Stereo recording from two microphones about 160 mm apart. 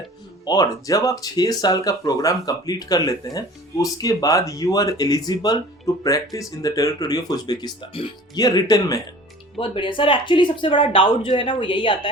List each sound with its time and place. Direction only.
0.4 s speech: 25° left (ahead or behind)